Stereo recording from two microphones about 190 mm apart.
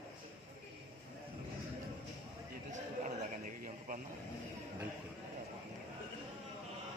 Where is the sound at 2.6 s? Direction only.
40° right (ahead or behind).